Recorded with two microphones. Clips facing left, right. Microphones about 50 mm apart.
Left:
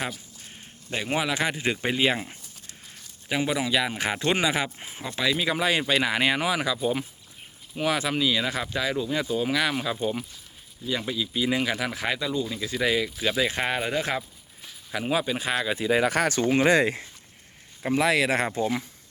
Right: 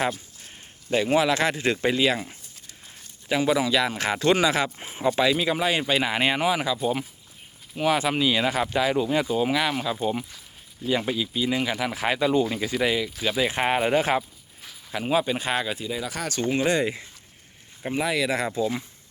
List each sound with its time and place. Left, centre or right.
0.9 s a man's voice: centre
3.2 s speech: centre
4.8 s speech: centre
7.8 s speech: centre
10.8 s speech: right
11.3 s speech: centre
12.0 s speech: centre
12.3 s speech: right
12.8 s speech: centre; by 14.3 s right
14.8 s speech: centre
15.9 s speech: left